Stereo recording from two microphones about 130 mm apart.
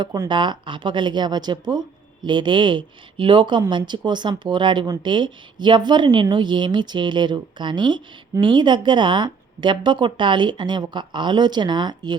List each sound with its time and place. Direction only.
0.3 s speech: 35° right (ahead or behind)